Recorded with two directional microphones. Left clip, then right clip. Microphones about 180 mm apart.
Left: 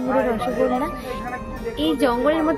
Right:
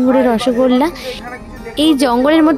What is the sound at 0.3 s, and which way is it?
A woman's voice, 65° right (ahead or behind).